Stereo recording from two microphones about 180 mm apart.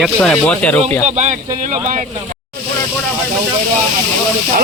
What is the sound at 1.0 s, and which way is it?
Speech, 40° right (ahead or behind).